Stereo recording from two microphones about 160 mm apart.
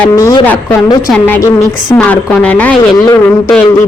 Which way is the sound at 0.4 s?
10° left (ahead or behind).